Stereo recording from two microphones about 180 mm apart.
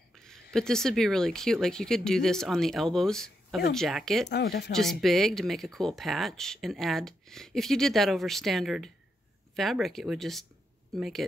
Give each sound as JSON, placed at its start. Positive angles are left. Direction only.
{"t": 0.2, "sound": "speech", "side_deg": 5}
{"t": 4.3, "sound": "speech", "side_deg": 65}
{"t": 4.7, "sound": "speech", "side_deg": 0}